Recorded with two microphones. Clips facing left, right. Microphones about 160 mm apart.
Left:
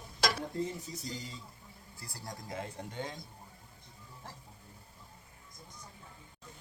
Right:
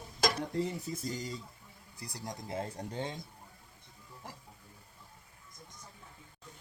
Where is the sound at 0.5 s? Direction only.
75° right (ahead or behind).